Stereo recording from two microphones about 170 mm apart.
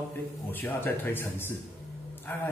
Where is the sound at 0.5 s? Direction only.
10° left (ahead or behind).